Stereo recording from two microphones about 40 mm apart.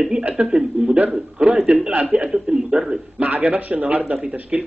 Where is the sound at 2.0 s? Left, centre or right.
Right.